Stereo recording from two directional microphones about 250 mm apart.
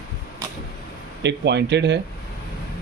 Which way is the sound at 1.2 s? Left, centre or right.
Right.